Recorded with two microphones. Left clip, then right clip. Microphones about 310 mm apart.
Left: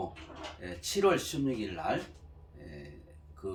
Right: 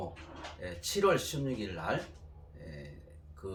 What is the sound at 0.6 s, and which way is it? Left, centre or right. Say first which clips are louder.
Speech: left 1 dB; centre.